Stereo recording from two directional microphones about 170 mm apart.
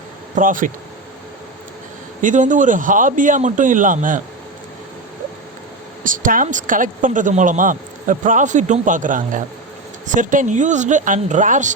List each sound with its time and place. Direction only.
0.3 s speech: 50° right (ahead or behind)
2.2 s speech: 50° right (ahead or behind)
6.0 s speech: 50° right (ahead or behind)